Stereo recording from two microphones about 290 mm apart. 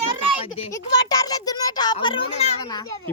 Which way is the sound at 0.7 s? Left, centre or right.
Centre.